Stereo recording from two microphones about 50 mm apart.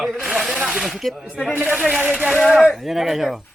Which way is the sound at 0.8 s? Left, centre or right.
Centre.